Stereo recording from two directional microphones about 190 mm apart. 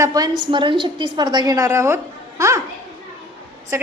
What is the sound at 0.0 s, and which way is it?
A woman's voice, 20° right (ahead or behind).